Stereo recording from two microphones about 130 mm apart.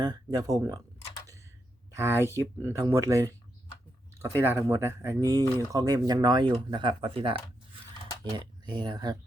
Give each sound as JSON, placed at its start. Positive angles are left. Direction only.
{"t": 0.0, "sound": "speech", "side_deg": -30}
{"t": 1.9, "sound": "speech", "side_deg": -20}